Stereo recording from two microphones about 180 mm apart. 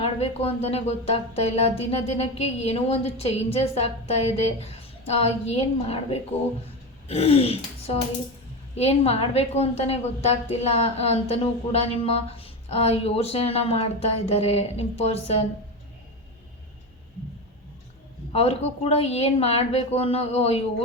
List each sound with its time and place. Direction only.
0.0 s a woman's voice: 35° left (ahead or behind)
18.3 s a woman's voice: 35° left (ahead or behind)